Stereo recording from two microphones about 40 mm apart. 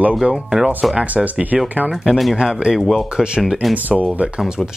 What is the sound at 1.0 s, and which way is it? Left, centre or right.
Speech, right.